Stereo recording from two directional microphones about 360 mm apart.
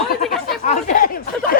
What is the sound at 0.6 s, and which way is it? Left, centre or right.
Speech, left.